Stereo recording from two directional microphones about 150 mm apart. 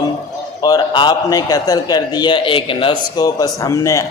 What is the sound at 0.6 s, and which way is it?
A man's voice, 25° left (ahead or behind).